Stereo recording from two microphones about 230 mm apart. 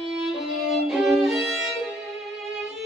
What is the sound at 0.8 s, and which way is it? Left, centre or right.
Violin, centre.